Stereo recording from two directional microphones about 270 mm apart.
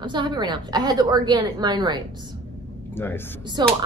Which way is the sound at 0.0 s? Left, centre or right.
Centre.